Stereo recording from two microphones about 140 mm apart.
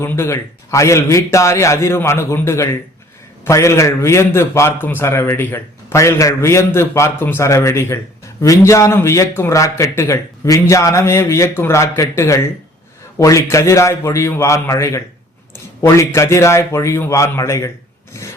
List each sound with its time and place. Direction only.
0.0 s a man's voice: 15° left (ahead or behind)
18.2 s filing: 20° left (ahead or behind)